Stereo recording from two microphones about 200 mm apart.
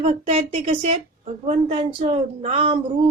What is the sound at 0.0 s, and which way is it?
A woman's voice, 30° right (ahead or behind).